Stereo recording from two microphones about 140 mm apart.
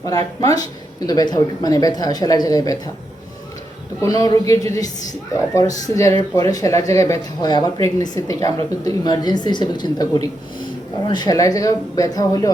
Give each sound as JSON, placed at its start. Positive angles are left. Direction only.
{"t": 0.3, "sound": "speech", "side_deg": 25}
{"t": 4.0, "sound": "speech", "side_deg": 25}